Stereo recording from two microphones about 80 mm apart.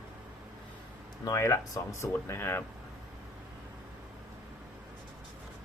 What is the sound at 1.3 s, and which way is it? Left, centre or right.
Speech, left.